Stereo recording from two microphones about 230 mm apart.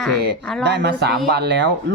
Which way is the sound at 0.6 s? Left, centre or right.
Right.